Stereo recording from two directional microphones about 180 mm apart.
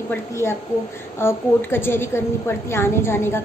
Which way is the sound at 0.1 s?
15° left (ahead or behind).